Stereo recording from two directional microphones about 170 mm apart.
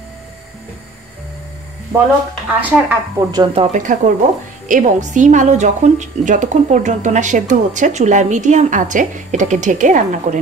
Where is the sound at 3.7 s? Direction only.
50° right (ahead or behind).